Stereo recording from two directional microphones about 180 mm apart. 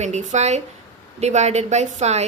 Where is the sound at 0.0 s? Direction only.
40° right (ahead or behind).